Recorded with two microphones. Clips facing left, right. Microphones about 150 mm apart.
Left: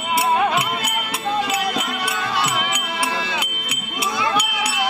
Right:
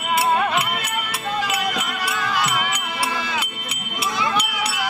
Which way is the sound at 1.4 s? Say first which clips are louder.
Even; 30° left (ahead or behind).